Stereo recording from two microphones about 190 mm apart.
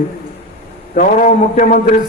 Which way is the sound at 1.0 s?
40° left (ahead or behind).